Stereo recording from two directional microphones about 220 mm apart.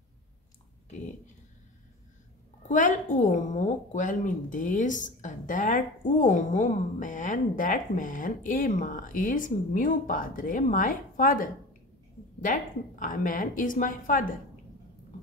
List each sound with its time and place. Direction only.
2.7 s a woman's voice: 35° left (ahead or behind)
13.0 s a woman's voice: 40° left (ahead or behind)